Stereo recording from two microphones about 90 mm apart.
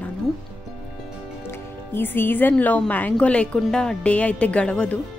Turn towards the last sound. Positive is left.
turn(degrees=10)  # may be behind; listen again after turning